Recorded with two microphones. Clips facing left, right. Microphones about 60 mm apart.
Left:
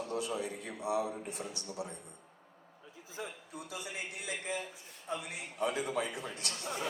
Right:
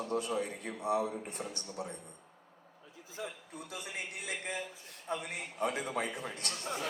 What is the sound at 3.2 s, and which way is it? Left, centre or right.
Speech, left.